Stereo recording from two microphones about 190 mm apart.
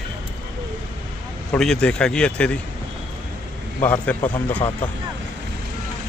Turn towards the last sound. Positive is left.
turn(degrees=10)  # may be behind; listen again after turning